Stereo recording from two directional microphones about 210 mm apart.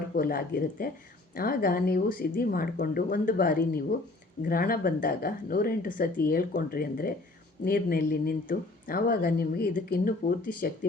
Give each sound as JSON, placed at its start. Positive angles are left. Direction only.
{"t": 0.2, "sound": "speech", "side_deg": 45}